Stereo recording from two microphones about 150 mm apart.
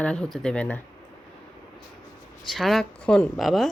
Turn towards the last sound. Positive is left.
turn(degrees=0)  # may be behind; listen again after turning